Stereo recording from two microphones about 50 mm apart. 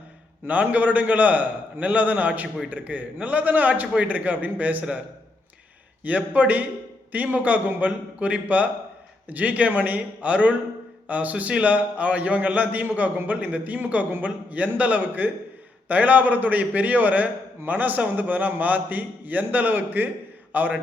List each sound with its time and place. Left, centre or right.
0.4 s a man's voice: right
6.1 s a man's voice: right